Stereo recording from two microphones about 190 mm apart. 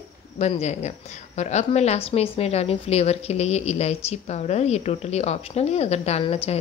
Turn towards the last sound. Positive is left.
turn(degrees=30)  # may be behind; listen again after turning